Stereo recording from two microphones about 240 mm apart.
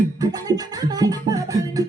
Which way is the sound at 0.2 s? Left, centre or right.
Centre.